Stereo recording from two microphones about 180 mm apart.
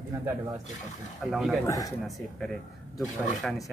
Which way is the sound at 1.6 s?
20° left (ahead or behind).